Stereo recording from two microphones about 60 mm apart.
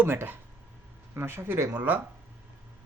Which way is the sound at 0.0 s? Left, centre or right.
Right.